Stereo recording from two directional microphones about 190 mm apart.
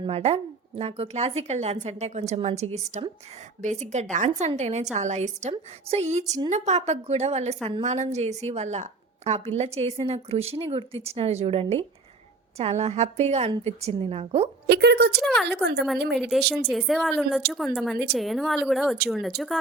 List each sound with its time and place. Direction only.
0.0 s a woman's voice: 35° right (ahead or behind)
14.7 s speech: 60° right (ahead or behind)
15.2 s speech: centre (ahead or behind)
15.4 s speech: 60° right (ahead or behind)
16.3 s speech: centre (ahead or behind)